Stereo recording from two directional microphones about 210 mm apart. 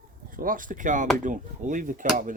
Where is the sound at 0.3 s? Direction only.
40° right (ahead or behind).